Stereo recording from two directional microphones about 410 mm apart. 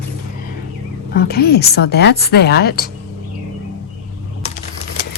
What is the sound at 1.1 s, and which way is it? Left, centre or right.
Speech, left.